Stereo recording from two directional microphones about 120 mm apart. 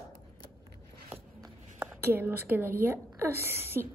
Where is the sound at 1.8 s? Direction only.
20° right (ahead or behind).